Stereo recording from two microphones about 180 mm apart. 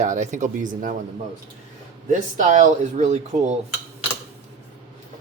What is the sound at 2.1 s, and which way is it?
Speech, 45° right (ahead or behind).